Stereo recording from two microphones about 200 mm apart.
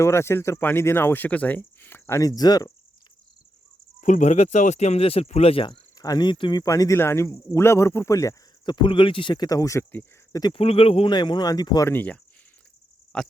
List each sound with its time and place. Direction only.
0.0 s speech: 15° left (ahead or behind)
4.0 s speech: 35° left (ahead or behind); by 13.3 s 5° left (ahead or behind)